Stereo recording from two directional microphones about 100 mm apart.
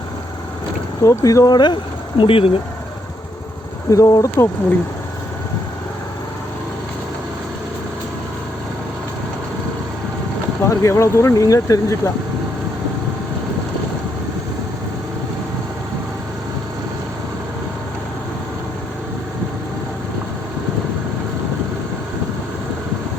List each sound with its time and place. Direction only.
1.0 s speech: 35° left (ahead or behind); by 2.5 s 60° left (ahead or behind)
3.8 s speech: 35° left (ahead or behind)
10.7 s speech: 30° left (ahead or behind)